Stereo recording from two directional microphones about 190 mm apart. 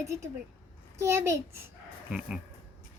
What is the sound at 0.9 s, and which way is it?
A child's voice, 15° right (ahead or behind).